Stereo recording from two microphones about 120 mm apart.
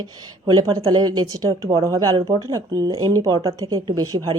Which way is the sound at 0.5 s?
35° right (ahead or behind).